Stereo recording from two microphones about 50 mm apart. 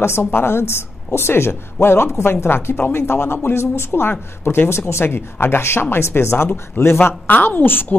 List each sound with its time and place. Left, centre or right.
0.0 s a woman's voice: left
4.6 s a woman's voice: left
7.2 s a woman's voice: left